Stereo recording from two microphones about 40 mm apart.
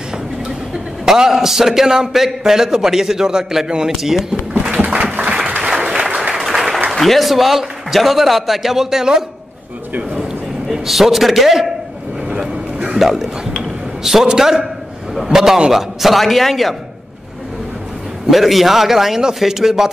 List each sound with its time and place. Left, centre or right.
1.0 s a man's voice: centre
4.6 s a sound: right
5.6 s applause: centre
6.9 s a man's voice: centre
10.7 s a man's voice: centre
13.0 s a man's voice: centre
14.2 s a man's voice: centre
18.3 s a man's voice: centre